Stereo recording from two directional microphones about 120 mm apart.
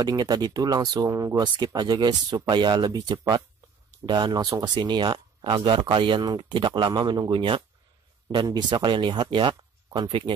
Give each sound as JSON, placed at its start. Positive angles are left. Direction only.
{"t": 0.0, "sound": "speech", "side_deg": -35}